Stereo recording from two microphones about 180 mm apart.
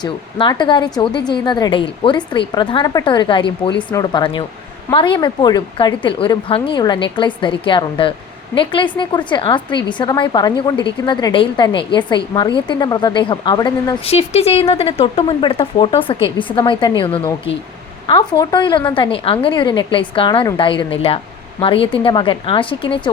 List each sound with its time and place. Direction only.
0.0 s a woman's voice: 25° left (ahead or behind)
14.0 s a woman's voice: 35° left (ahead or behind)